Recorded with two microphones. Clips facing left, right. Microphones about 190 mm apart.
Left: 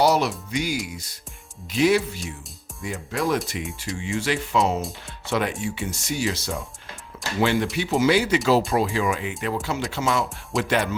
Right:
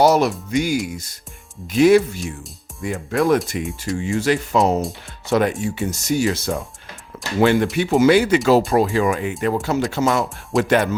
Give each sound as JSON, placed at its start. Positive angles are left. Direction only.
{"t": 0.0, "sound": "speech", "side_deg": -50}
{"t": 3.9, "sound": "speech", "side_deg": -45}